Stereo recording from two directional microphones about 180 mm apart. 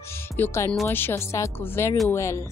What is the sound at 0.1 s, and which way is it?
Music, 15° left (ahead or behind).